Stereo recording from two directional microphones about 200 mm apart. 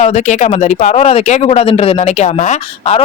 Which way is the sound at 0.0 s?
35° left (ahead or behind).